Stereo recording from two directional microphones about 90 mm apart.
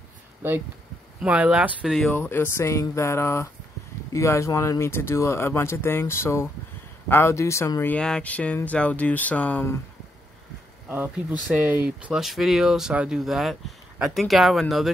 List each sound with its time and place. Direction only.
1.2 s speech: 15° right (ahead or behind)
2.1 s a man's voice: 25° left (ahead or behind)
8.0 s speech: 10° left (ahead or behind)
10.9 s speech: 20° right (ahead or behind)
12.2 s speech: 5° right (ahead or behind)